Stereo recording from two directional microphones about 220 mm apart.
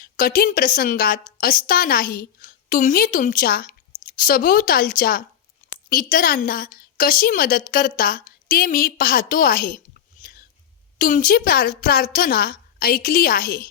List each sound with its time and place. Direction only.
0.0 s a woman's voice: 40° left (ahead or behind)
10.9 s a woman's voice: 40° left (ahead or behind)